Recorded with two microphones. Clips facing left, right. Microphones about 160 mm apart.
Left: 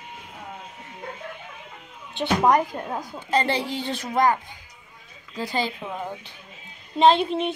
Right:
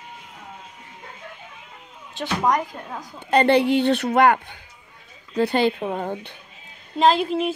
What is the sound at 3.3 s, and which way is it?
Speech, 65° right (ahead or behind).